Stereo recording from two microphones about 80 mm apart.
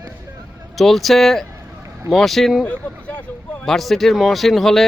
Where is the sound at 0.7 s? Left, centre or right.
Centre.